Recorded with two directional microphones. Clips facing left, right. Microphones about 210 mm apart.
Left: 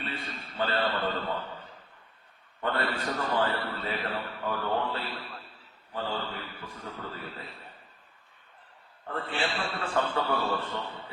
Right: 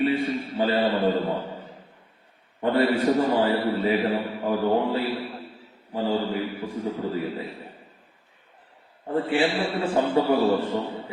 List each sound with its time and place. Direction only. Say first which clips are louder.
0.0 s a man's voice: right 15 dB; 10° right (ahead or behind)
2.6 s a man's voice: right 10 dB; 15° right (ahead or behind)
3.2 s a man's voice: right 8 dB; 25° right (ahead or behind)
3.4 s a man's voice: right 9 dB; 10° right (ahead or behind)
4.4 s mantra: right 8 dB; 35° right (ahead or behind)
4.8 s a man's voice: right 9 dB; 15° right (ahead or behind)
6.3 s a man's voice: right 13 dB; 10° right (ahead or behind)
9.0 s a man's voice: right 10 dB; 15° right (ahead or behind)